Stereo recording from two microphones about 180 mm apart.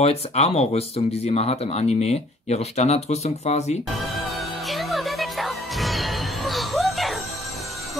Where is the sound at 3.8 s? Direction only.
Centre (ahead or behind).